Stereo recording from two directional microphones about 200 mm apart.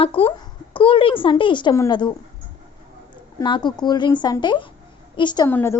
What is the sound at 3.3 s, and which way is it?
A woman's voice, 20° left (ahead or behind).